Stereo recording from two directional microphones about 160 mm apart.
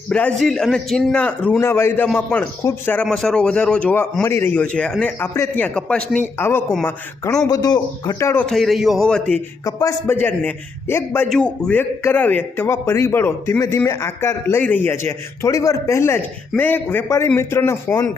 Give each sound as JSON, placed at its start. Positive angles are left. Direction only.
{"t": 0.1, "sound": "a man's voice", "side_deg": 5}
{"t": 8.4, "sound": "a man's voice", "side_deg": 0}
{"t": 9.6, "sound": "a man's voice", "side_deg": 20}